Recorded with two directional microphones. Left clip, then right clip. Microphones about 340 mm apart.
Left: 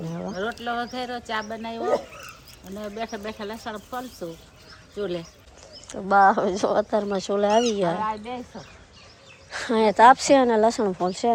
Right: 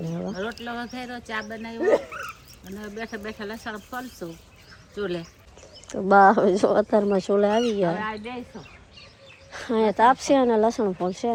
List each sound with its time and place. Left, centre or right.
0.0 s a sound: centre
0.3 s speech: centre
7.9 s speech: centre
9.5 s speech: centre